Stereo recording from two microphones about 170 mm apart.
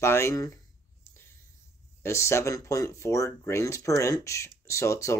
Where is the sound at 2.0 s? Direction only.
15° left (ahead or behind).